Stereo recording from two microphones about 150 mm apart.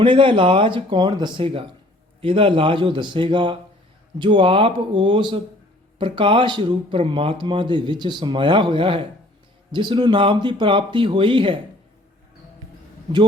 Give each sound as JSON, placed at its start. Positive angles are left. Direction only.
{"t": 0.0, "sound": "speech", "side_deg": -35}